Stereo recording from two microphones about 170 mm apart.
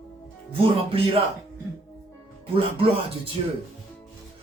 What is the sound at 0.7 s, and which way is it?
Speech, 30° right (ahead or behind).